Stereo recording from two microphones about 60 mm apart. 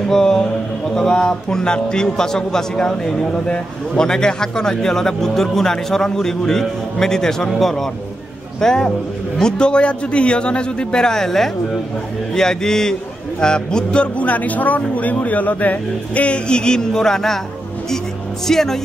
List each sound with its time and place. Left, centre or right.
0.1 s speech: centre
18.5 s speech: centre